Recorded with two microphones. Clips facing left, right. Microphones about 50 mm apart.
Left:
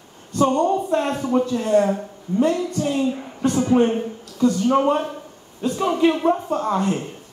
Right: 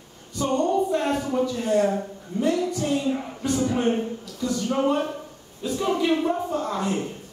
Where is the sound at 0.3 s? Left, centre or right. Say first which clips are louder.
Left 9 dB; left.